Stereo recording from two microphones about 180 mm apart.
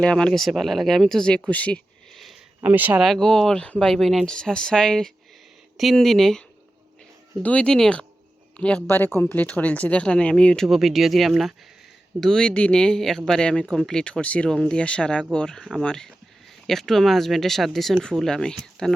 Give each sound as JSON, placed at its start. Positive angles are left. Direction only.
{"t": 0.0, "sound": "speech", "side_deg": 5}
{"t": 1.5, "sound": "a sound", "side_deg": 10}
{"t": 2.6, "sound": "speech", "side_deg": -10}
{"t": 7.4, "sound": "speech", "side_deg": 5}